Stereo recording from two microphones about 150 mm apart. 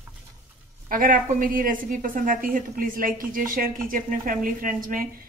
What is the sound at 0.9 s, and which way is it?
A woman's voice, 70° right (ahead or behind).